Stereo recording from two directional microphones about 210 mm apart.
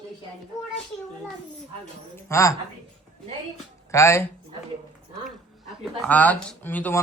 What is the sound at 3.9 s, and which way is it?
Speech, 15° left (ahead or behind).